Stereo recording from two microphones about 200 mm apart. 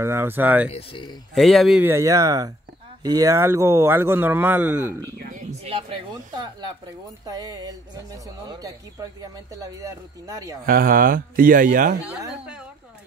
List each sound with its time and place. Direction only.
0.0 s speech: 10° right (ahead or behind)
0.7 s speech: 30° left (ahead or behind)
1.3 s speech: centre (ahead or behind)
5.6 s a sound: 25° right (ahead or behind)
7.2 s a woman's voice: 20° right (ahead or behind)
10.6 s speech: 45° right (ahead or behind)